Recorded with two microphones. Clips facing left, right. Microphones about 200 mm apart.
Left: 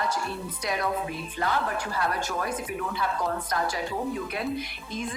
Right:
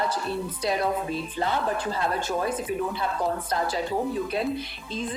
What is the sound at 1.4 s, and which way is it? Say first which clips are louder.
Speech: right 1 dB; 25° right (ahead or behind).